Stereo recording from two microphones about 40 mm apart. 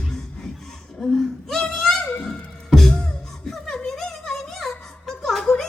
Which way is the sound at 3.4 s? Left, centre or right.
Centre.